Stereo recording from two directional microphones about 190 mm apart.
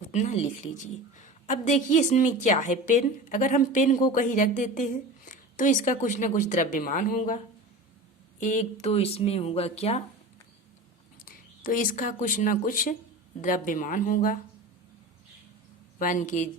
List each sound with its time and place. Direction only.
0.1 s a woman's voice: 40° left (ahead or behind)
8.4 s a woman's voice: 40° left (ahead or behind)
11.6 s speech: 45° left (ahead or behind)
16.0 s speech: 45° left (ahead or behind)